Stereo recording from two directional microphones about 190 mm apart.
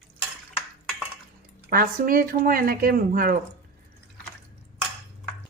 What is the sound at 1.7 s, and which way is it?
Speech, 50° right (ahead or behind).